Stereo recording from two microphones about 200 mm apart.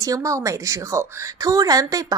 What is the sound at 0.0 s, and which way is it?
A woman's voice, 15° right (ahead or behind).